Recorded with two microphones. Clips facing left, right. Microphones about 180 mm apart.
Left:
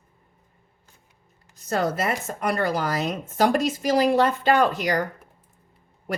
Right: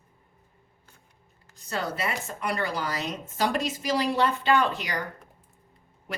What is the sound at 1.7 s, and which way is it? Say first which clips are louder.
A woman's voice: left 6 dB; 45° left (ahead or behind).